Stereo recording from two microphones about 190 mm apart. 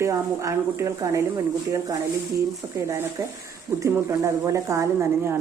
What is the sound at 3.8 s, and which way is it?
A woman's voice, 15° right (ahead or behind).